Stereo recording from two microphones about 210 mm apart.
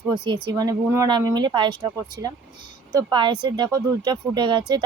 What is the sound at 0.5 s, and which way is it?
Speech, 20° right (ahead or behind).